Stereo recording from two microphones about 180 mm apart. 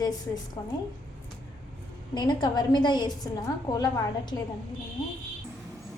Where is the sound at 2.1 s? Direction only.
25° left (ahead or behind).